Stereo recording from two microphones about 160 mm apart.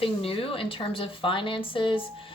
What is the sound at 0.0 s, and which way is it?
Speech, 35° left (ahead or behind).